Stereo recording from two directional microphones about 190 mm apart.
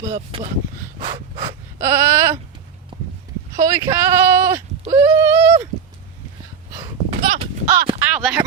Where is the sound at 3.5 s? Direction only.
20° right (ahead or behind).